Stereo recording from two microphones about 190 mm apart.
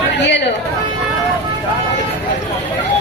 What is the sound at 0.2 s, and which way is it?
Chatter, 65° left (ahead or behind).